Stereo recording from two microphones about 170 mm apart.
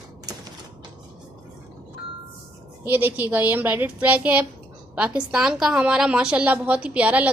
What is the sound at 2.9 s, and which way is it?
A woman's voice, 10° right (ahead or behind).